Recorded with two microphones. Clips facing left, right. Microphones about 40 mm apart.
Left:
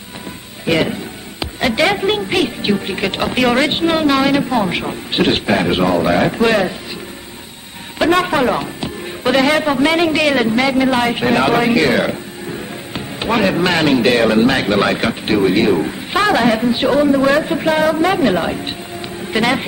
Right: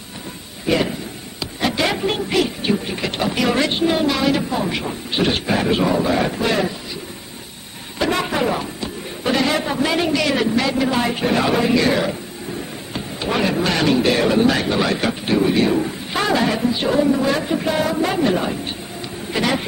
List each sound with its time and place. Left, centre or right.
1.4 s a man's voice: left
8.0 s a man's voice: left